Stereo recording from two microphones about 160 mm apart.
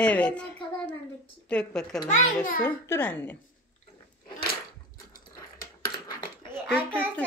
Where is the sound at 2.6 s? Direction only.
15° left (ahead or behind).